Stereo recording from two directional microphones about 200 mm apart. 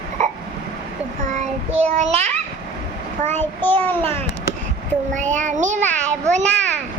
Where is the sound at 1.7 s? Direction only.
30° right (ahead or behind).